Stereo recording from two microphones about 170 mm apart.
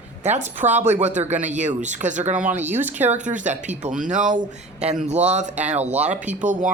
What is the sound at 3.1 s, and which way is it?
Speech, 45° right (ahead or behind).